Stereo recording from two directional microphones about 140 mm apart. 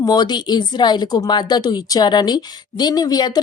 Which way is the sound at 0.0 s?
30° left (ahead or behind).